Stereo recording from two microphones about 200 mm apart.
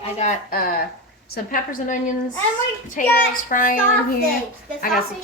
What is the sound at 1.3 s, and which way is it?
A woman's voice, 45° left (ahead or behind).